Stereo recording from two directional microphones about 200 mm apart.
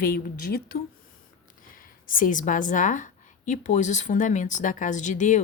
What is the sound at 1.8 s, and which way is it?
A woman's voice, 45° left (ahead or behind).